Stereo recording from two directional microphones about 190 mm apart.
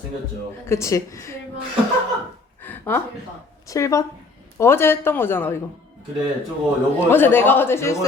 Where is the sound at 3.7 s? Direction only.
15° left (ahead or behind).